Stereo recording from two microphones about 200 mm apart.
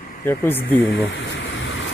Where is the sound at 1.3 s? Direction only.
65° left (ahead or behind).